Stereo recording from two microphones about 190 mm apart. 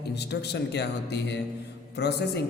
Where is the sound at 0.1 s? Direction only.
60° left (ahead or behind).